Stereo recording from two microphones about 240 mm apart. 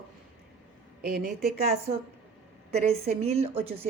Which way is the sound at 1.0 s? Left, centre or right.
Right.